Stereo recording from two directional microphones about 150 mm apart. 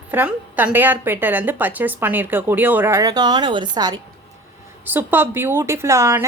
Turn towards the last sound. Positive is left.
turn(degrees=-20)  # may be behind; listen again after turning